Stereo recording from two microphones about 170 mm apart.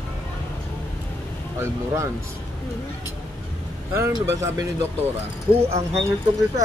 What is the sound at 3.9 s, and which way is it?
Speech, 15° right (ahead or behind).